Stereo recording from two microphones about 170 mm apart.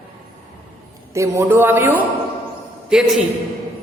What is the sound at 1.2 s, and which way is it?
A woman's voice, 15° right (ahead or behind).